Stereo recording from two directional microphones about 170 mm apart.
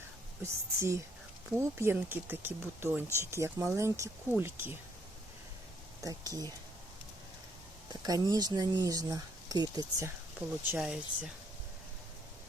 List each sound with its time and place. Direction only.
0.4 s speech: 15° right (ahead or behind)
6.0 s speech: 20° right (ahead or behind)
8.0 s speech: 20° right (ahead or behind)
10.7 s speech: 5° right (ahead or behind)